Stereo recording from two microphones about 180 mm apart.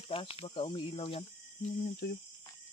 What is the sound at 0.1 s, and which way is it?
Speech, 30° left (ahead or behind).